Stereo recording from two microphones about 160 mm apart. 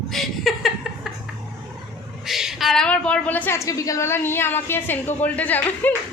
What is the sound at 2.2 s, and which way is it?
A woman's voice, centre (ahead or behind).